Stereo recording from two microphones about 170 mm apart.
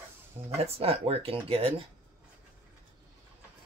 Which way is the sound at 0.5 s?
35° right (ahead or behind).